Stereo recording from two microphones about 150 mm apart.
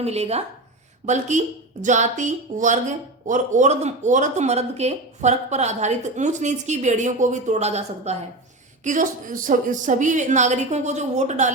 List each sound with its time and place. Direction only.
0.0 s speech: 45° right (ahead or behind)
8.8 s a woman's voice: 60° right (ahead or behind)